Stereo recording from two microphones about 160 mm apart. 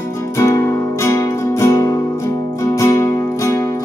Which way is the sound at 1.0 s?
20° left (ahead or behind).